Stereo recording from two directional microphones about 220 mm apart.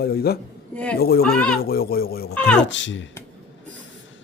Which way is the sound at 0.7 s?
5° left (ahead or behind).